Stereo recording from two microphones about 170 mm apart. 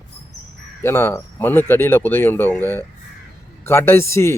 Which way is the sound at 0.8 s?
15° left (ahead or behind).